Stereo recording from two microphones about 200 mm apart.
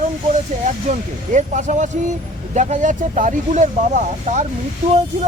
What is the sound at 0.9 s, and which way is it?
Speech, 40° right (ahead or behind).